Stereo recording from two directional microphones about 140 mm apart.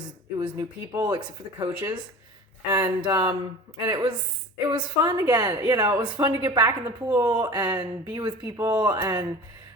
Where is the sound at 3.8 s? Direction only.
25° right (ahead or behind).